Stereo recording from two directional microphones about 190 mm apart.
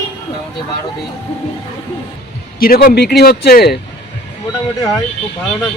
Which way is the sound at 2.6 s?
50° left (ahead or behind).